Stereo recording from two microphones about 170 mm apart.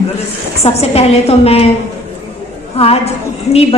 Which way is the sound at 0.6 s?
35° left (ahead or behind).